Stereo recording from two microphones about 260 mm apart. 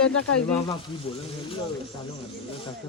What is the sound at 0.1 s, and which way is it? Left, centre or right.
Speech, left.